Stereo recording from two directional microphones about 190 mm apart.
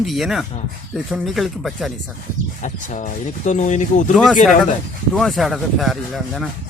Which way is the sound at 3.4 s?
40° left (ahead or behind).